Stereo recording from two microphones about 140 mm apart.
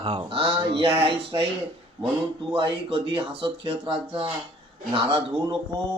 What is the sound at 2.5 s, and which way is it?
Speech, 40° right (ahead or behind).